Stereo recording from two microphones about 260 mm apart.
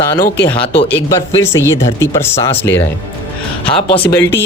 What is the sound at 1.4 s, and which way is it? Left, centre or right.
Speech, centre.